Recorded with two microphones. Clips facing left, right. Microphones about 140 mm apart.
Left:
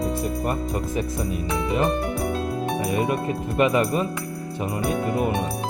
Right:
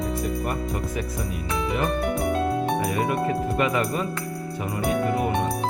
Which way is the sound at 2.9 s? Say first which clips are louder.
Even; 20° left (ahead or behind).